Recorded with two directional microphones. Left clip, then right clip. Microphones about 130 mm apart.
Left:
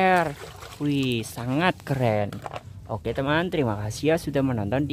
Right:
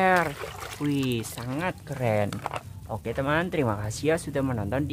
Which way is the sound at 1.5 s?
60° left (ahead or behind).